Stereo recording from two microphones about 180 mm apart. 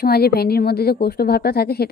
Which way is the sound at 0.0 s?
60° left (ahead or behind).